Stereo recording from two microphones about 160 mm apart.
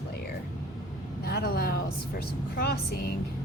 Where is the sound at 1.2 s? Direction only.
75° left (ahead or behind).